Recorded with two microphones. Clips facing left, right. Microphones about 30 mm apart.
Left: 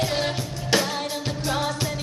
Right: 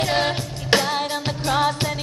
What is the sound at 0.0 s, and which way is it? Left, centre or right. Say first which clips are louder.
Music: right 4 dB; right.